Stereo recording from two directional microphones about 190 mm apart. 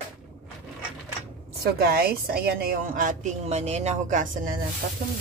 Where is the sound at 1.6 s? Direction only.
55° right (ahead or behind).